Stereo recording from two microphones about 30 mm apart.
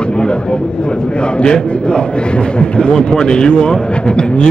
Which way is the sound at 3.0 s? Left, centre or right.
Left.